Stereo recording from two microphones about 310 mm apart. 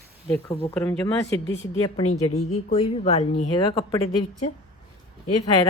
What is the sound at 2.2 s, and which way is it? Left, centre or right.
A woman's voice, centre.